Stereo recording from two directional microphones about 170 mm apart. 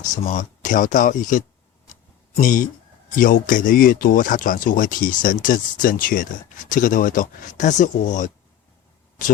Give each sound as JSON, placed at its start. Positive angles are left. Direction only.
{"t": 0.1, "sound": "speech", "side_deg": 50}